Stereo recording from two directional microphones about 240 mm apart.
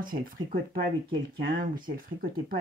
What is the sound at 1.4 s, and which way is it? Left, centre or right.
Speech, right.